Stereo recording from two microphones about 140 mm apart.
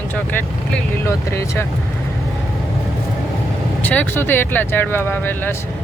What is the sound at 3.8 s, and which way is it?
Speech, 10° left (ahead or behind).